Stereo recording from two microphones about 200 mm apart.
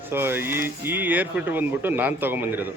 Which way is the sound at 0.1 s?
10° right (ahead or behind).